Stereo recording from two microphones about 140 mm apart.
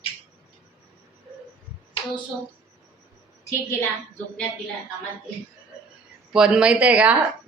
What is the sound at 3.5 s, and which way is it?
Speech, 20° left (ahead or behind).